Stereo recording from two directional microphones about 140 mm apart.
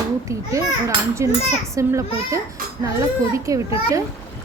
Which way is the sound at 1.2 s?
20° right (ahead or behind).